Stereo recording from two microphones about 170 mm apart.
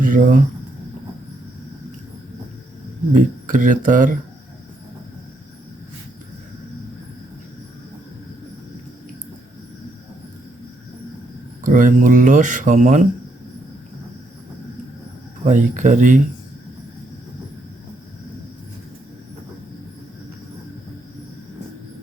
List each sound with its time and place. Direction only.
0.0 s speech: 50° right (ahead or behind)
3.1 s speech: 50° right (ahead or behind)
11.6 s speech: 50° right (ahead or behind)
15.4 s speech: 45° right (ahead or behind)